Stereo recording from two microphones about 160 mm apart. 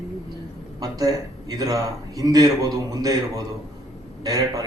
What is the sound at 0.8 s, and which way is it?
A man's voice, 25° right (ahead or behind).